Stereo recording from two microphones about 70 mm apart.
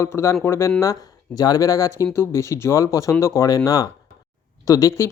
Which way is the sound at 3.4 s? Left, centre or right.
Left.